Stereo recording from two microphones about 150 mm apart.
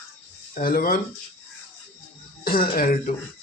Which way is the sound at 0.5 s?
75° left (ahead or behind).